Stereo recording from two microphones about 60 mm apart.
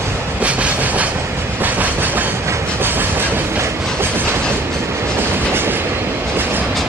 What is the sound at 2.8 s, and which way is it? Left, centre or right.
Train, right.